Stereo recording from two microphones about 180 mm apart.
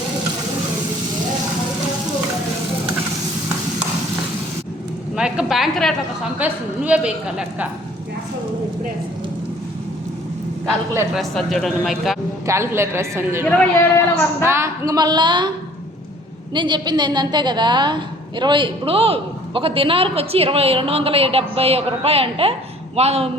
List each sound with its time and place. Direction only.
5.1 s a sound: 5° right (ahead or behind)
6.4 s a woman's voice: 5° right (ahead or behind)
11.1 s speech: centre (ahead or behind)
12.5 s a woman's voice: 15° right (ahead or behind)
13.5 s a man's voice: 10° left (ahead or behind)
14.4 s a woman's voice: 15° right (ahead or behind)
16.6 s a woman's voice: 25° right (ahead or behind)